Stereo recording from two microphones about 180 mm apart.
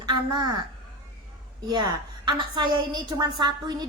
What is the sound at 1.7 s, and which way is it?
A woman's voice, 25° right (ahead or behind).